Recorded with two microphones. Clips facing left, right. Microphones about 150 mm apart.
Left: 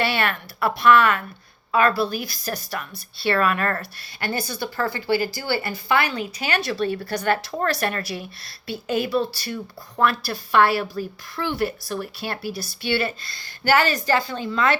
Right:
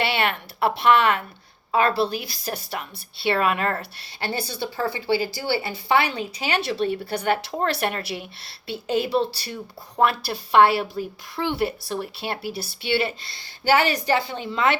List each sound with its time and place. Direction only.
0.0 s a woman's voice: 20° right (ahead or behind)